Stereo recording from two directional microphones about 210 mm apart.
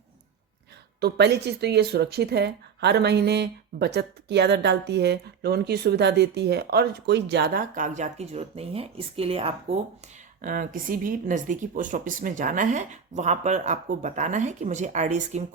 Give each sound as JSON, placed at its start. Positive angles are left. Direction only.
{"t": 1.0, "sound": "speech", "side_deg": -55}
{"t": 10.4, "sound": "speech", "side_deg": -40}